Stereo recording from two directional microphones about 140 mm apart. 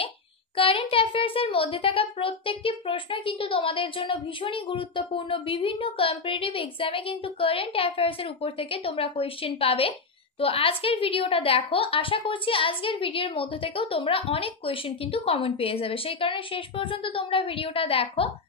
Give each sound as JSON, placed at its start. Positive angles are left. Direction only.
{"t": 0.6, "sound": "a child's voice", "side_deg": 40}